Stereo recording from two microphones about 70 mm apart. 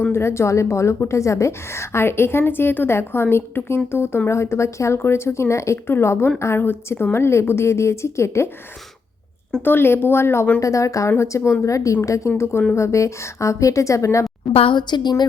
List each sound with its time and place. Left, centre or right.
0.1 s a woman's voice: left
9.6 s a woman's voice: left
10.6 s a woman's voice: left
12.4 s a woman's voice: left
14.8 s a woman's voice: left